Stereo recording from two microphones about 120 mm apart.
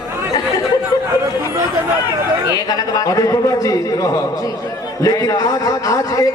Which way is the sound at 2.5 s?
30° left (ahead or behind).